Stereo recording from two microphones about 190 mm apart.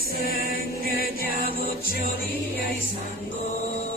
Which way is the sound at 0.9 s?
50° left (ahead or behind).